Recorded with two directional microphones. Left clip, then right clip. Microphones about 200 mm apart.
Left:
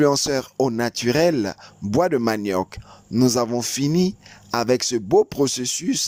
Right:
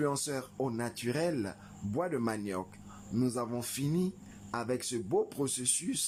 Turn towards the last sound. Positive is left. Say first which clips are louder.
# left 12 dB
turn(degrees=40)  # may be behind; listen again after turning